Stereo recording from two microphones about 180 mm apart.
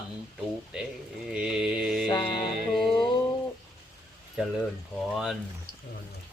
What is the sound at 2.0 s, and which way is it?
Music, 25° left (ahead or behind).